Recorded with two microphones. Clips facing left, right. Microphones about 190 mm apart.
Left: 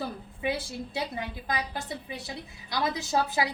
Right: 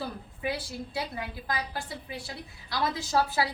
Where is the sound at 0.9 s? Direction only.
20° left (ahead or behind).